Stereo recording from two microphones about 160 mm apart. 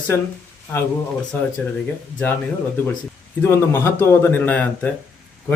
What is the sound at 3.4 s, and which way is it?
Speech, 15° left (ahead or behind).